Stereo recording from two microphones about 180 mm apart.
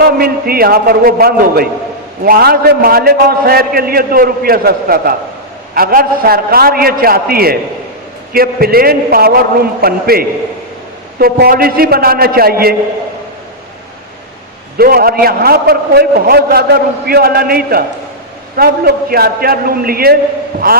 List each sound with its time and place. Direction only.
0.0 s a man's voice: 55° right (ahead or behind)
14.8 s a man's voice: 55° right (ahead or behind)